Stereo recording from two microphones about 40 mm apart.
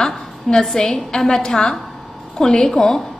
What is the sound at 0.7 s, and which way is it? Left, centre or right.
A woman's voice, centre.